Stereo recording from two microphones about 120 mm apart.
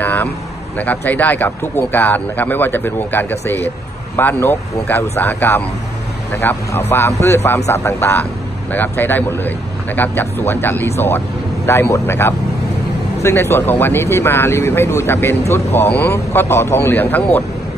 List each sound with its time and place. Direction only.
0.0 s vehicle: 15° left (ahead or behind)
0.7 s speech: 15° left (ahead or behind)